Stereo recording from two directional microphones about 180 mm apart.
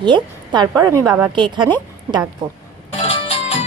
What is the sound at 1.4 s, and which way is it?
Speech, 25° right (ahead or behind).